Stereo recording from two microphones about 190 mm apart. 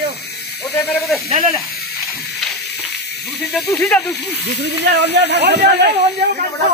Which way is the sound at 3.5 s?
5° left (ahead or behind).